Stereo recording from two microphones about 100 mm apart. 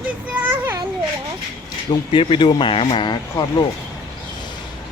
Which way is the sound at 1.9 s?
55° left (ahead or behind).